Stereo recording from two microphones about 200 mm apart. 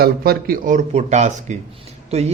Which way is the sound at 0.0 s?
50° right (ahead or behind).